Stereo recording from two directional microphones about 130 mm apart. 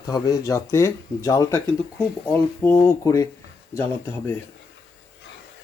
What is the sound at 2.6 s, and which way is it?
Speech, 20° left (ahead or behind).